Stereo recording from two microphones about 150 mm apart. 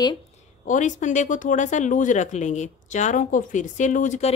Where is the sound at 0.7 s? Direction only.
55° left (ahead or behind).